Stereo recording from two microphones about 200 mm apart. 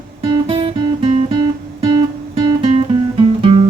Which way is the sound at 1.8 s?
25° right (ahead or behind).